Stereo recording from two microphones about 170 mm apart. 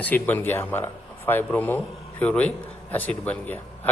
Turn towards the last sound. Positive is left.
turn(degrees=10)  # may be behind; listen again after turning